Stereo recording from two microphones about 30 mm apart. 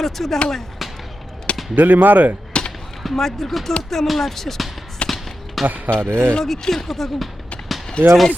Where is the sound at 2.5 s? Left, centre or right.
Left.